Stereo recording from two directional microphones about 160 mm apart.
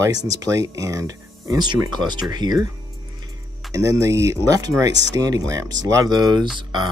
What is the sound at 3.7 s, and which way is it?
Speech, 20° right (ahead or behind).